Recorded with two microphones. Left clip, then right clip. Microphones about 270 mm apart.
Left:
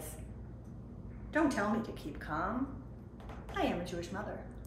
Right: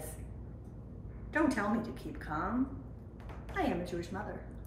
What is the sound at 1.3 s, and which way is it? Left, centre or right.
A woman's voice, centre.